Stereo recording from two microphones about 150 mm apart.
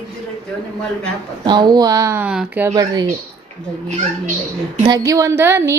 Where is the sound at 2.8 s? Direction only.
25° right (ahead or behind).